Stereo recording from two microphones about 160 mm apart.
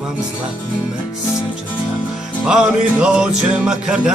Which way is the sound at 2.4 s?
5° right (ahead or behind).